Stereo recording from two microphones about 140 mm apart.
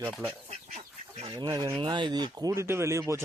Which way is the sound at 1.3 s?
30° right (ahead or behind).